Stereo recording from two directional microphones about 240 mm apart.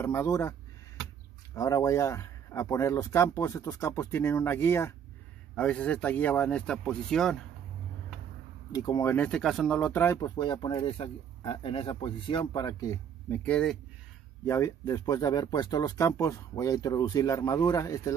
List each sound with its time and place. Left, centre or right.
0.0 s speech: centre
8.7 s speech: centre